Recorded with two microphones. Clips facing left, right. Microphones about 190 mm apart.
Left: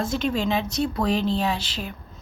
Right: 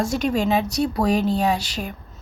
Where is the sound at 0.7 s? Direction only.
10° right (ahead or behind).